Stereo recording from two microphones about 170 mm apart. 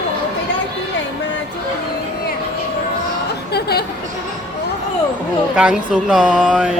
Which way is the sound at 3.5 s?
70° left (ahead or behind).